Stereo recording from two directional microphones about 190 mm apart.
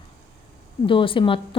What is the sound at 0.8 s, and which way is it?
Speech, 25° left (ahead or behind).